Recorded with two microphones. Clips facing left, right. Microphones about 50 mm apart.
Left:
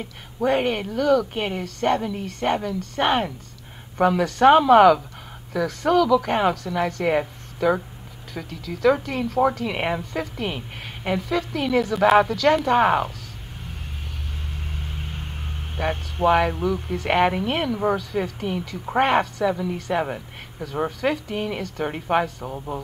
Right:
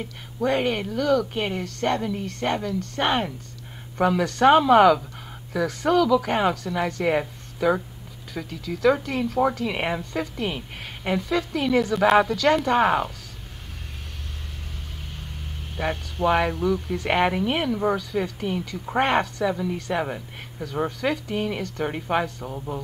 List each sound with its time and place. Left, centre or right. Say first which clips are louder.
0.4 s speech: left 2 dB; centre
14.9 s vehicle: left 5 dB; left
15.8 s speech: left 2 dB; centre
16.5 s speech: right 1 dB; centre
16.9 s speech: left 5 dB; centre